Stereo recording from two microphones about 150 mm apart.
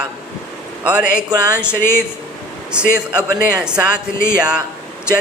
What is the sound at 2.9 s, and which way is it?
Speech, 5° right (ahead or behind).